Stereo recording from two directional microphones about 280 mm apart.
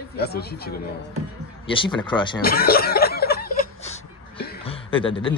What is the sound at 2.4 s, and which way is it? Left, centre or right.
Chuckle, left.